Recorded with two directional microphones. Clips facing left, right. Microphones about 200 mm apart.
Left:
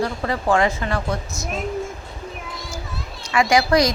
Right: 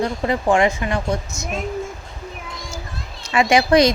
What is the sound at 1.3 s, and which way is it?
Speech, centre (ahead or behind).